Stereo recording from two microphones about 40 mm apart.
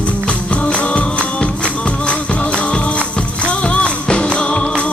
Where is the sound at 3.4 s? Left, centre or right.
Left.